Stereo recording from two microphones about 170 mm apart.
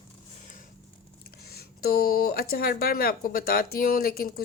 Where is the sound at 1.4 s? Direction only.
65° left (ahead or behind).